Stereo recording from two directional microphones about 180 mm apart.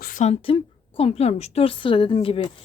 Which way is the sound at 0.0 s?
45° left (ahead or behind).